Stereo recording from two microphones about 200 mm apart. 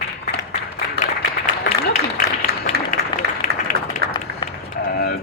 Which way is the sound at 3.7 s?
40° left (ahead or behind).